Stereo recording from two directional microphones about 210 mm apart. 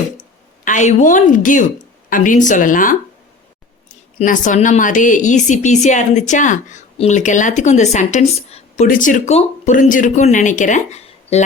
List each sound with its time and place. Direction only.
0.6 s a woman's voice: 35° left (ahead or behind)
4.2 s a woman's voice: 35° left (ahead or behind)